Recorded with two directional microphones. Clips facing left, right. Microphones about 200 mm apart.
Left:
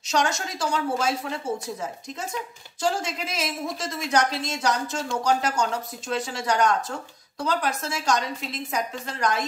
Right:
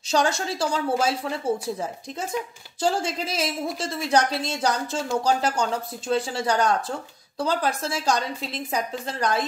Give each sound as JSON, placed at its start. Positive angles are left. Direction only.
{"t": 0.1, "sound": "a woman's voice", "side_deg": -30}
{"t": 2.8, "sound": "a woman's voice", "side_deg": -30}